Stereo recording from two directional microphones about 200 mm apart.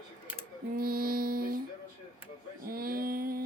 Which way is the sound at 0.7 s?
45° right (ahead or behind).